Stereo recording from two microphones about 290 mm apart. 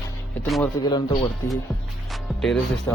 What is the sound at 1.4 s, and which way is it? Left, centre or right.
Speech, centre.